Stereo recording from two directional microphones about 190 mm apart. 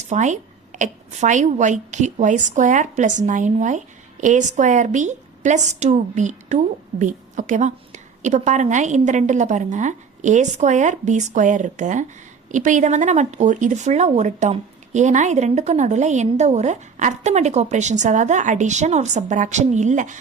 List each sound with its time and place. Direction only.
0.0 s a woman's voice: 40° right (ahead or behind)